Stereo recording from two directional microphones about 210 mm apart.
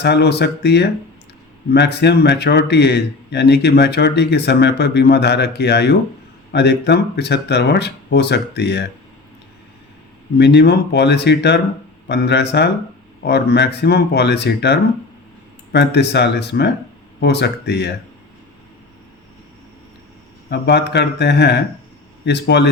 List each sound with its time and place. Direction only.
0.0 s speech: 55° left (ahead or behind)
10.3 s speech: 55° left (ahead or behind)
20.5 s speech: 55° left (ahead or behind)